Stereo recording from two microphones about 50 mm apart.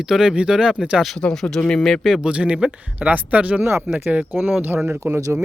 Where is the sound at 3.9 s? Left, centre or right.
Right.